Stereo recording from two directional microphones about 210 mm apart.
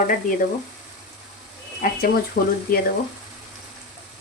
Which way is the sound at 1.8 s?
45° left (ahead or behind).